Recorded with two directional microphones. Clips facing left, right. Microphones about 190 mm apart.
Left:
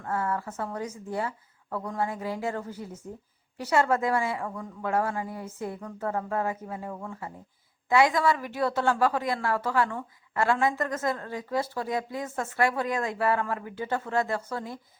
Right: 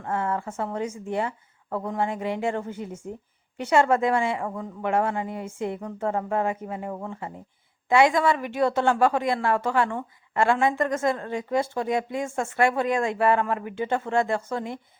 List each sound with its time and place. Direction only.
0.0 s a woman's voice: 25° right (ahead or behind)